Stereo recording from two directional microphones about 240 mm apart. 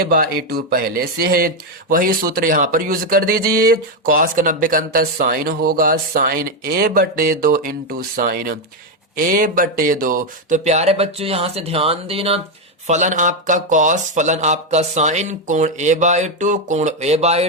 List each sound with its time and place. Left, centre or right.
0.1 s speech: right